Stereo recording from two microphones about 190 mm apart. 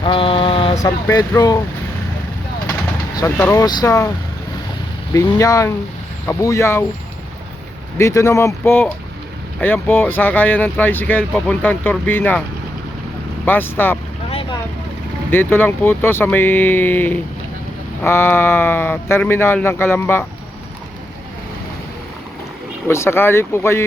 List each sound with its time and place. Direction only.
0.0 s mantra: 30° left (ahead or behind)
1.0 s speech: 15° left (ahead or behind)
3.3 s speech: 10° left (ahead or behind)
3.6 s speech: 20° left (ahead or behind)
5.1 s speech: 15° left (ahead or behind)
7.9 s speech: 15° left (ahead or behind)
13.4 s speech: 10° left (ahead or behind)
15.3 s speech: 10° left (ahead or behind)
22.9 s speech: 15° left (ahead or behind)